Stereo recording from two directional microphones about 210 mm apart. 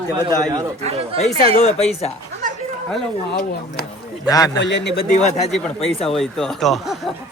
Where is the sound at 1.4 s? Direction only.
30° right (ahead or behind).